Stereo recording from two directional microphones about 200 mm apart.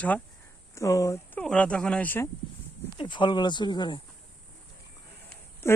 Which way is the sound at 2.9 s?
25° left (ahead or behind).